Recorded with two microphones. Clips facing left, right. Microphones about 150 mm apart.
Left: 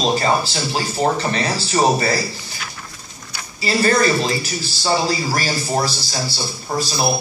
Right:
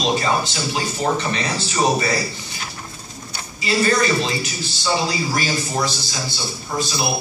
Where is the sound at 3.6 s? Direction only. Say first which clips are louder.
Left 2 dB; 40° left (ahead or behind).